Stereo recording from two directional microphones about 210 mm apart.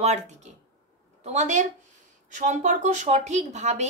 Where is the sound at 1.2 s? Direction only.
35° right (ahead or behind).